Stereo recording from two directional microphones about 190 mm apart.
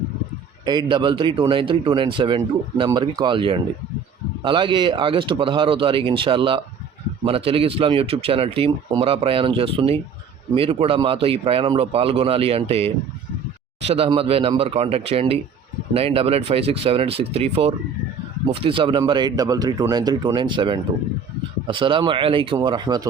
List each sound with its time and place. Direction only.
0.6 s speech: 20° right (ahead or behind)